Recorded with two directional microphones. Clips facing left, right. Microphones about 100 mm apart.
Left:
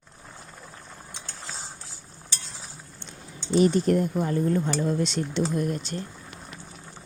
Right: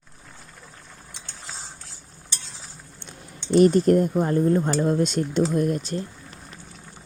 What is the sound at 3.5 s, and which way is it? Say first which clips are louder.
Speech: right 4 dB; 50° right (ahead or behind).